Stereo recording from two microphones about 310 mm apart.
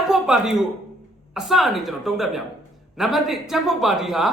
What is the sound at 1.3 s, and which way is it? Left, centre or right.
A man's voice, centre.